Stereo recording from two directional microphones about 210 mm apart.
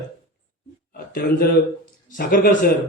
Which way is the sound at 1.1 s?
45° left (ahead or behind).